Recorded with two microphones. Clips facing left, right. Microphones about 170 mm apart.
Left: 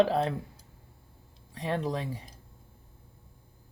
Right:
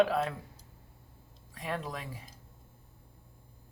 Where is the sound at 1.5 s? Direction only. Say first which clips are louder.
Left 6 dB; 25° left (ahead or behind).